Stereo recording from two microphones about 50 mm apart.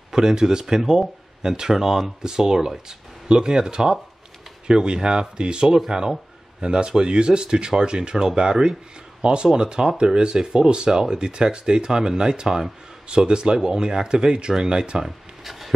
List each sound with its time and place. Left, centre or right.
0.1 s speech: centre